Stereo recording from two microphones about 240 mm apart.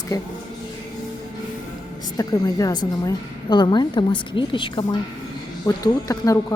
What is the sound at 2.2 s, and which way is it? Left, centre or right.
A woman's voice, centre.